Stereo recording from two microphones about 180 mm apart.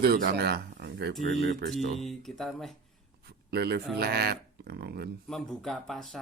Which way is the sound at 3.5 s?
65° right (ahead or behind).